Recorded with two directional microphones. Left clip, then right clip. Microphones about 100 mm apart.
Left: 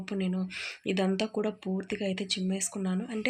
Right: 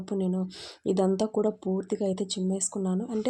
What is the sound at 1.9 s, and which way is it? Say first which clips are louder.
Speech: right 2 dB; 45° right (ahead or behind).